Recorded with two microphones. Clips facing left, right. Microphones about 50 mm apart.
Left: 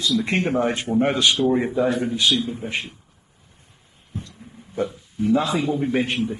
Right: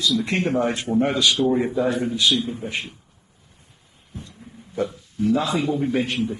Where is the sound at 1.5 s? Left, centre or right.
Left.